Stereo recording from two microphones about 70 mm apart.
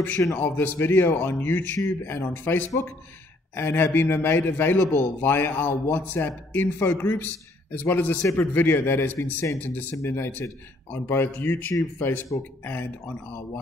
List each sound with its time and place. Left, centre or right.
0.4 s a man's voice: left